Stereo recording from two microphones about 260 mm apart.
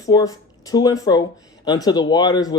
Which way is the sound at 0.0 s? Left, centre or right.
Centre.